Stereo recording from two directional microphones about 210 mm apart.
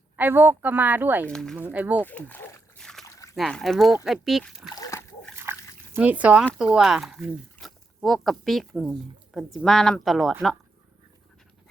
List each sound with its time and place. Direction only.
0.2 s speech: 10° right (ahead or behind)
1.3 s speech: centre (ahead or behind)
1.5 s speech: 10° right (ahead or behind)
2.0 s a sound: 10° left (ahead or behind)
3.0 s dog: 15° left (ahead or behind)
3.3 s speech: centre (ahead or behind)
4.7 s splash: 15° left (ahead or behind)
5.4 s liquid: 10° right (ahead or behind)
6.4 s speech: 5° left (ahead or behind)